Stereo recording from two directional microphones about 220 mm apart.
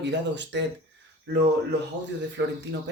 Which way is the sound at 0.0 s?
50° right (ahead or behind).